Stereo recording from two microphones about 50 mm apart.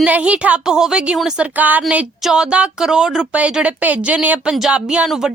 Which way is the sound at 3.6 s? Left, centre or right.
Right.